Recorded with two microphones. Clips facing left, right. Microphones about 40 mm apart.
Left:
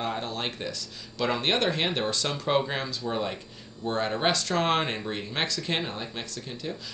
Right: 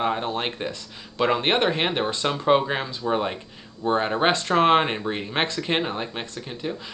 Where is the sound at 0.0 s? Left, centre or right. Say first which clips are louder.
Right 6 dB; right.